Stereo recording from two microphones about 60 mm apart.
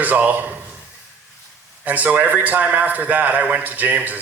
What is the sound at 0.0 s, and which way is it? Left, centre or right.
Speech, right.